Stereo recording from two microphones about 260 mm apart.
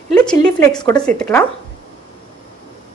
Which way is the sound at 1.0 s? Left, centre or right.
Centre.